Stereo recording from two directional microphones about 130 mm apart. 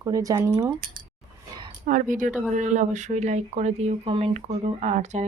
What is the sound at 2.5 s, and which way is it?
Speech, 70° right (ahead or behind).